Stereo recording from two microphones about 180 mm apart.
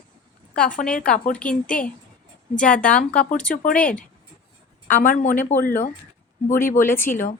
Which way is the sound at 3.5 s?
50° left (ahead or behind).